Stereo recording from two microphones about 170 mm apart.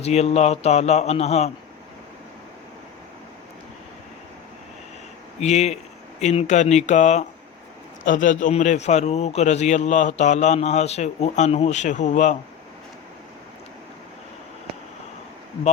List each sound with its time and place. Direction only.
0.0 s speech: 40° left (ahead or behind)
5.4 s a man's voice: 40° left (ahead or behind)